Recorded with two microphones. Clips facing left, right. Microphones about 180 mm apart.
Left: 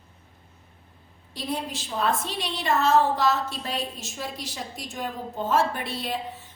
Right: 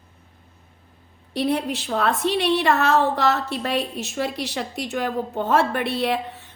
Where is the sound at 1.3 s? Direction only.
65° right (ahead or behind).